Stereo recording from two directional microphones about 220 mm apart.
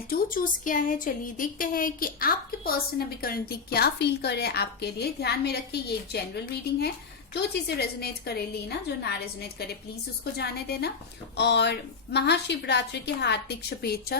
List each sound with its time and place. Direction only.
0.1 s a woman's voice: 40° left (ahead or behind)
10.3 s a woman's voice: 45° left (ahead or behind)